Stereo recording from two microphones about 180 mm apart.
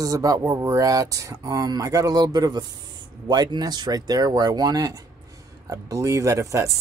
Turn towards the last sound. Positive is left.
turn(degrees=-15)  # may be behind; listen again after turning